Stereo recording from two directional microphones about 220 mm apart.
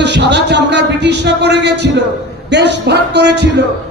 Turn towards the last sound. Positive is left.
turn(degrees=-50)  # may be behind; listen again after turning